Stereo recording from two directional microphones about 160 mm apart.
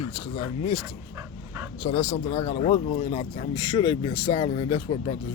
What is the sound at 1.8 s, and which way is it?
Speech, 40° left (ahead or behind).